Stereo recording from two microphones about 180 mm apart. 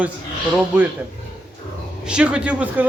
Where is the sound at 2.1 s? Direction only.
5° right (ahead or behind).